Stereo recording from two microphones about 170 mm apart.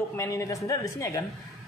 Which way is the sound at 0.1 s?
15° left (ahead or behind).